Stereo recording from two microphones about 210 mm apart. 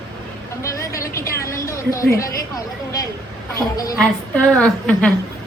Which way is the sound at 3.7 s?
15° left (ahead or behind).